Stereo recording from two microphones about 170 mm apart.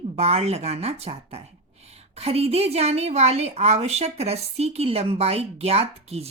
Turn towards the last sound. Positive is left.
turn(degrees=-35)  # may be behind; listen again after turning